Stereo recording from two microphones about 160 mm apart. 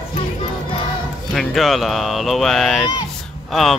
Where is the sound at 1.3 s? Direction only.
Centre (ahead or behind).